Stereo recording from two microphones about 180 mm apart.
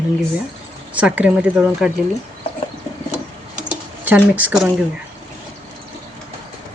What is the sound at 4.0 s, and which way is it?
Speech, 10° right (ahead or behind).